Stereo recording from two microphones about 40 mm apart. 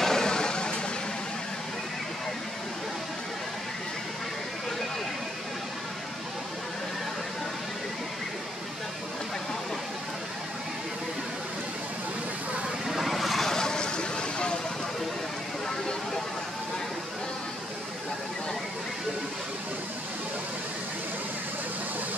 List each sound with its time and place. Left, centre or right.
0.0 s a sound: centre
12.8 s vehicle: centre
13.5 s vehicle: centre